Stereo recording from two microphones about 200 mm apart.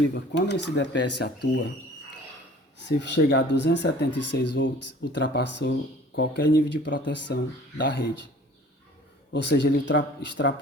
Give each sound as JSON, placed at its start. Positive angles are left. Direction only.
{"t": 0.1, "sound": "speech", "side_deg": 60}
{"t": 2.8, "sound": "speech", "side_deg": 60}
{"t": 9.3, "sound": "speech", "side_deg": 60}